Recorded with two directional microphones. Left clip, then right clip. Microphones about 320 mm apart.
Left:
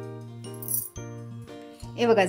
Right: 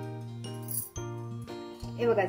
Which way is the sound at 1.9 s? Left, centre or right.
Left.